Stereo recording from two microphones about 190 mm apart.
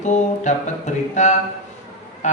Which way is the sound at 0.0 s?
40° left (ahead or behind).